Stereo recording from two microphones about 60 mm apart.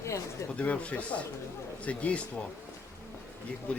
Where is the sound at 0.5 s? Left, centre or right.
Left.